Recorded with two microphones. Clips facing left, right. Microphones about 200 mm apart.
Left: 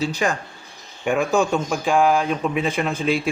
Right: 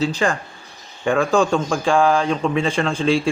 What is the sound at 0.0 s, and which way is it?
Speech, 10° left (ahead or behind).